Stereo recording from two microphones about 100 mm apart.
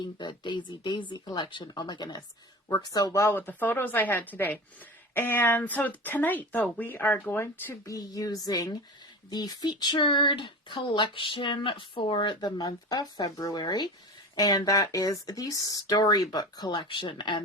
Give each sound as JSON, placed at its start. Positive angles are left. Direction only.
{"t": 0.0, "sound": "speech", "side_deg": 50}
{"t": 2.6, "sound": "speech", "side_deg": 35}
{"t": 3.3, "sound": "speech", "side_deg": 20}
{"t": 7.9, "sound": "speech", "side_deg": 35}